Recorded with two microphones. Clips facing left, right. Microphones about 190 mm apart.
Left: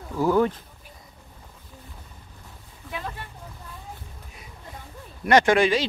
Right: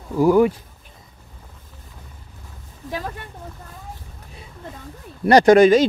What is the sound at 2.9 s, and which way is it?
Speech, 40° right (ahead or behind).